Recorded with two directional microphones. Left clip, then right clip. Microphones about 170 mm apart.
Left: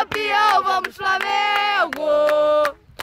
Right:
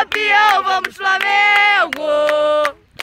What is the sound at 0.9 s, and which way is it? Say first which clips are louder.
Child singing: right 5 dB; centre (ahead or behind).